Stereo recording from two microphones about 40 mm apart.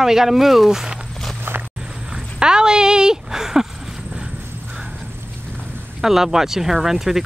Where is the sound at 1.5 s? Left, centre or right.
Right.